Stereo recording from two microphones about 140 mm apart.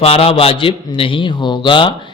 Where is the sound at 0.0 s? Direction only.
45° left (ahead or behind).